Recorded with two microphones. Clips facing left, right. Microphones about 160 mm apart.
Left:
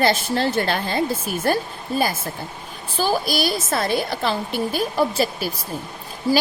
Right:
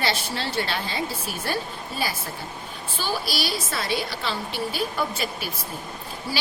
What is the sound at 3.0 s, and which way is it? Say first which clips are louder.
A woman's voice: left 7 dB; 50° left (ahead or behind).